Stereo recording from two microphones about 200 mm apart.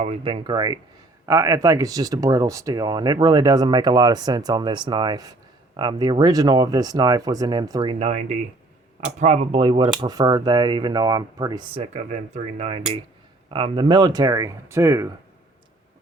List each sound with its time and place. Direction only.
0.0 s speech: 30° right (ahead or behind); by 15.1 s 15° right (ahead or behind)